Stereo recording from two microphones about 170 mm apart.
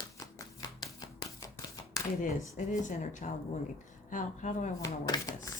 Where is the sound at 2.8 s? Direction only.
45° left (ahead or behind).